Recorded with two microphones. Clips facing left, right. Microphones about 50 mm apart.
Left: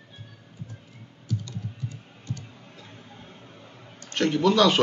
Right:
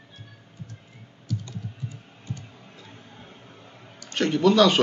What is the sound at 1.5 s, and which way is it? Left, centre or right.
Computer keyboard, centre.